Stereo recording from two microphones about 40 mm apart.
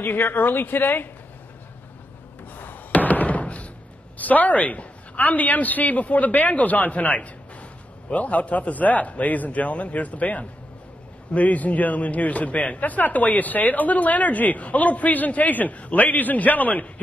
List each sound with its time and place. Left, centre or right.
0.0 s a woman's voice: left
2.5 s knock: left
4.2 s a man's voice: left